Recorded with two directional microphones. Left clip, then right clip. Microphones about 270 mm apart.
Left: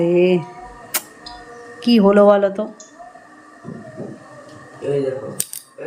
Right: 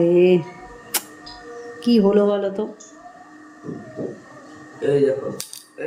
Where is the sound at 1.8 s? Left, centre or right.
Centre.